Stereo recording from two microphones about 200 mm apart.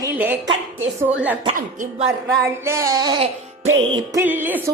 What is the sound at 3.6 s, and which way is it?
Music, 75° right (ahead or behind).